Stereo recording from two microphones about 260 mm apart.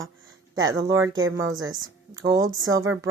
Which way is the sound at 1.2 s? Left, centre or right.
Right.